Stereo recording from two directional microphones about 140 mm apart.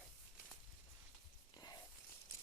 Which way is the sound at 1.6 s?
30° left (ahead or behind).